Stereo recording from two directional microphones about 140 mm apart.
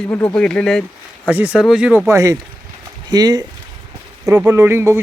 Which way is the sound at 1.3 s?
10° right (ahead or behind).